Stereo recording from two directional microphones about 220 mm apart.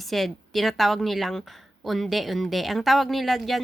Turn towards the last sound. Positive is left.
turn(degrees=0)  # may be behind; listen again after turning